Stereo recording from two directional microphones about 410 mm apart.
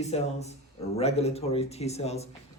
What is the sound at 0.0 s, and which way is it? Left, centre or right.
Speech, centre.